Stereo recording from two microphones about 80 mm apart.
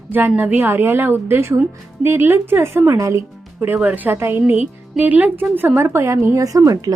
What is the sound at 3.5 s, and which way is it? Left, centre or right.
A woman's voice, right.